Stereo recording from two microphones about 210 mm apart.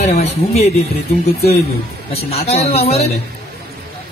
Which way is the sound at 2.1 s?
30° left (ahead or behind).